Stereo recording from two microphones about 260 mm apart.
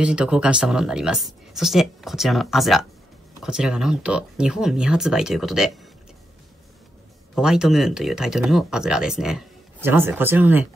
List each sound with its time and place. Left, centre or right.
0.0 s speech: centre
7.3 s speech: centre